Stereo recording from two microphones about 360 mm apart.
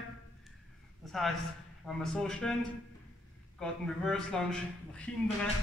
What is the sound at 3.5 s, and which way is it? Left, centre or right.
Speech, centre.